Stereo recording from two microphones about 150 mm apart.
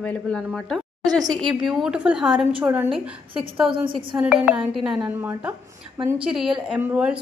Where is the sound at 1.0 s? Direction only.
25° right (ahead or behind).